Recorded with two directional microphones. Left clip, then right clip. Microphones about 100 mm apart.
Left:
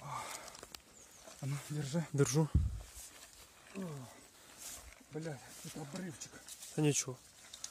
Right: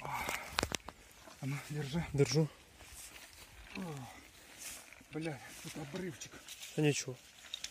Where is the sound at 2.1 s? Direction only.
25° left (ahead or behind).